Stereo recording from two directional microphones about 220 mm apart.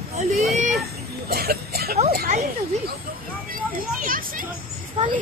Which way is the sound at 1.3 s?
45° right (ahead or behind).